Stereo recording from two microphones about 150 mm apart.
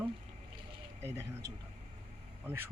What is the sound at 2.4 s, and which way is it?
Speech, 15° right (ahead or behind).